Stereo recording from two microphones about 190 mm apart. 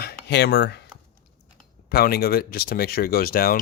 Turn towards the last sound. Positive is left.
turn(degrees=50)  # may be behind; listen again after turning